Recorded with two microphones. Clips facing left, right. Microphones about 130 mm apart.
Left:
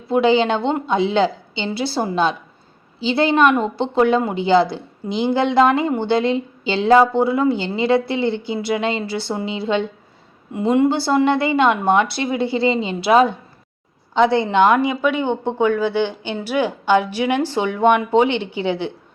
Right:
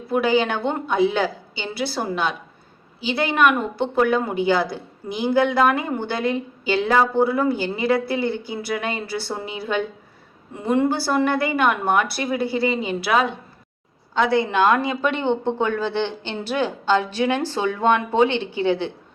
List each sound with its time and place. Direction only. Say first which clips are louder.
0.1 s a woman's voice: left 4 dB; 25° left (ahead or behind)